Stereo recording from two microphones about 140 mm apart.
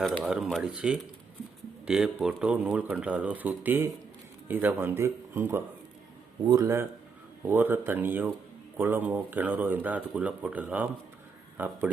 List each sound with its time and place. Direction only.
0.0 s speech: centre (ahead or behind)